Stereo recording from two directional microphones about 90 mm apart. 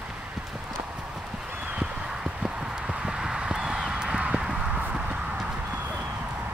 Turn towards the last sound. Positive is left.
turn(degrees=-10)  # may be behind; listen again after turning